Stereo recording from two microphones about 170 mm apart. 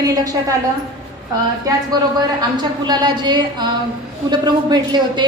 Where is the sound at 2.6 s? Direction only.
25° right (ahead or behind).